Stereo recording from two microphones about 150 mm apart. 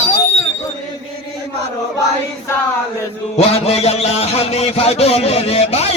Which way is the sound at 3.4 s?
45° left (ahead or behind).